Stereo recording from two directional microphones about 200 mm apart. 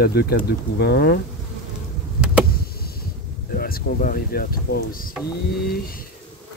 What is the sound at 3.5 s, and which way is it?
Speech, 45° left (ahead or behind).